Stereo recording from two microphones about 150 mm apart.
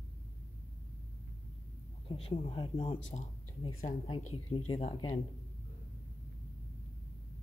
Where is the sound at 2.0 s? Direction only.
40° left (ahead or behind).